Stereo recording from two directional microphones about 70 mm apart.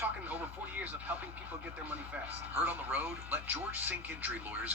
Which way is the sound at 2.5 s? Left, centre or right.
Right.